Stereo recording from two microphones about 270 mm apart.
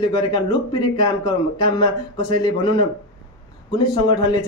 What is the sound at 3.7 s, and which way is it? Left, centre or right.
Speech, centre.